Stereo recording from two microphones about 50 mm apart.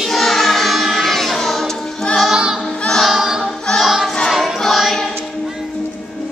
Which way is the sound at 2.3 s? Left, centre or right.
Centre.